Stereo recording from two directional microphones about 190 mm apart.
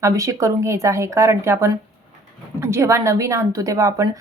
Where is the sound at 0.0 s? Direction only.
15° right (ahead or behind).